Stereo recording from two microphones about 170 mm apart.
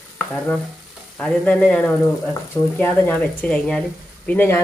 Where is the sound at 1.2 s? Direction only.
5° left (ahead or behind).